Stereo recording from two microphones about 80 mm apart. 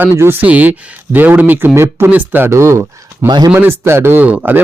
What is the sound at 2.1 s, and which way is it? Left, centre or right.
Speech, right.